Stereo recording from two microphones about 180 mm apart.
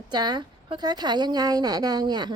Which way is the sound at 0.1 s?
25° right (ahead or behind).